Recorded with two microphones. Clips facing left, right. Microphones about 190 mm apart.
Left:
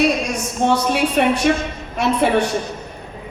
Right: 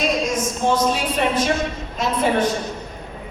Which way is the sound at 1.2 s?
60° left (ahead or behind).